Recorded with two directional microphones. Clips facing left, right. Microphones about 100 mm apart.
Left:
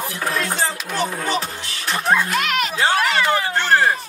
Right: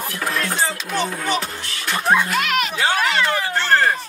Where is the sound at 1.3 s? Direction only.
30° left (ahead or behind).